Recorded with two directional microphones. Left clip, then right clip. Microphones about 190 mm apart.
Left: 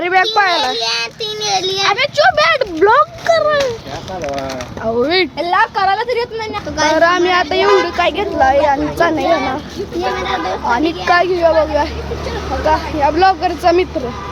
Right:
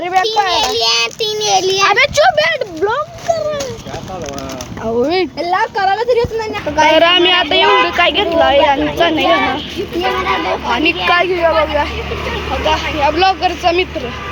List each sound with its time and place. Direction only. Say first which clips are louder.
0.0 s children playing: left 1 dB; 20° left (ahead or behind)
0.5 s child singing: right 3 dB; 20° right (ahead or behind)
1.9 s a sound: right 1 dB; 35° right (ahead or behind)
2.3 s a sound: left 2 dB; 20° left (ahead or behind)
4.9 s a sound: even; 10° left (ahead or behind)
5.4 s speech: left 1 dB; 35° left (ahead or behind)
6.7 s speech: right 3 dB; 5° right (ahead or behind)
11.0 s speech: left 2 dB; 25° left (ahead or behind)
12.6 s speech: even; 15° left (ahead or behind)